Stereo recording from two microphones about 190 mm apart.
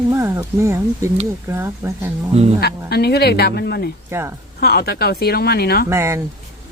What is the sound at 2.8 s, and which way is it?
Speech, 60° left (ahead or behind).